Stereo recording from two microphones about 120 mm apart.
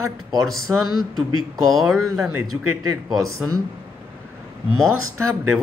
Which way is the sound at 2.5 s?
20° right (ahead or behind).